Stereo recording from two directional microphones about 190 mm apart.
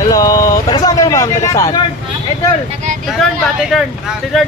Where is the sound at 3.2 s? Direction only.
Centre (ahead or behind).